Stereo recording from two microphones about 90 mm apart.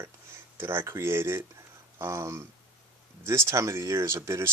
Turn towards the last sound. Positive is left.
turn(degrees=-30)  # may be behind; listen again after turning